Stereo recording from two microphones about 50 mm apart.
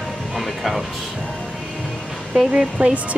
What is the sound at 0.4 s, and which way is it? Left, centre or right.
Music, centre.